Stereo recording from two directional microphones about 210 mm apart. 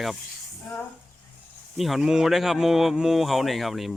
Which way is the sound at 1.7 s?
Centre (ahead or behind).